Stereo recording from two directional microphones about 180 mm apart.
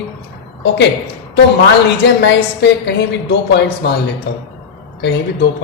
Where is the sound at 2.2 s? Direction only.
70° left (ahead or behind).